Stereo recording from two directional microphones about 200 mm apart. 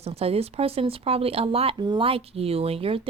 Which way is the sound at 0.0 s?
30° right (ahead or behind).